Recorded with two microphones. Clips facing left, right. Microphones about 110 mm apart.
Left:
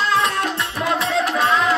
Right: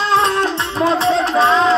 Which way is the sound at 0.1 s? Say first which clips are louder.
Right 4 dB; 30° right (ahead or behind).